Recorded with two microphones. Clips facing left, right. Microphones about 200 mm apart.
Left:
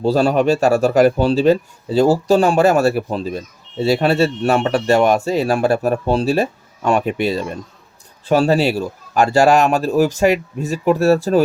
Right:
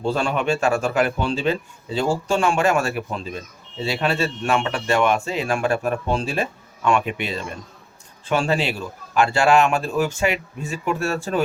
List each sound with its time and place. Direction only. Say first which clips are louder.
0.0 s speech: left 7 dB; 35° left (ahead or behind)